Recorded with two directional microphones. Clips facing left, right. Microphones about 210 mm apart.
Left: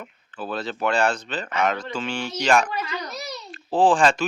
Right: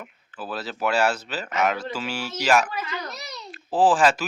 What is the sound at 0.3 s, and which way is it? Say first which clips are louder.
Speech: left 3 dB; 5° right (ahead or behind).